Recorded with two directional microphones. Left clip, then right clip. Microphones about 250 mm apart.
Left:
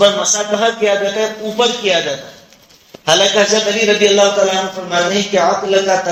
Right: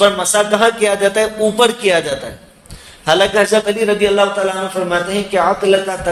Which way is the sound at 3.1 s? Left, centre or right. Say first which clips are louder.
Left 1 dB; right.